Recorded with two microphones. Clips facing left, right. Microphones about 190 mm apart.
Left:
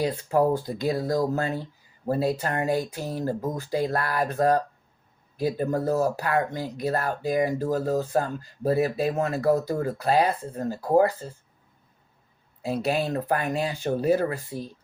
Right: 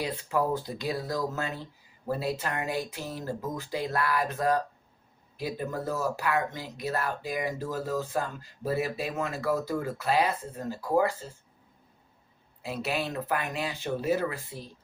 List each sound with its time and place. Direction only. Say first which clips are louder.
0.0 s speech: left 6 dB; 35° left (ahead or behind)
12.6 s speech: left 6 dB; 35° left (ahead or behind)